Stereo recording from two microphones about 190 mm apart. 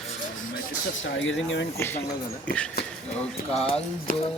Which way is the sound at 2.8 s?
55° left (ahead or behind).